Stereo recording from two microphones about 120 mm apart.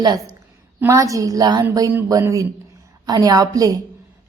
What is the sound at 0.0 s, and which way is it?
A woman's voice, 35° right (ahead or behind).